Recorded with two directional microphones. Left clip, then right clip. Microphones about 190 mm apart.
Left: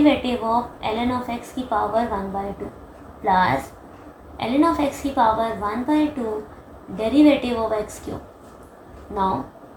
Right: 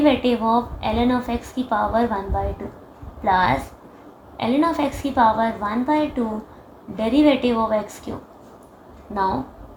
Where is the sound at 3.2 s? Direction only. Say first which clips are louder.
Even; 40° right (ahead or behind).